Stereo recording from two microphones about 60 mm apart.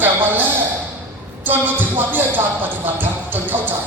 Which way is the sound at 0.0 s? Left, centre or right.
Right.